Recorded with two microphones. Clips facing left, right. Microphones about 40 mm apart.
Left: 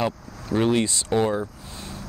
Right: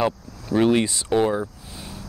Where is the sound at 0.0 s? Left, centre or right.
Centre.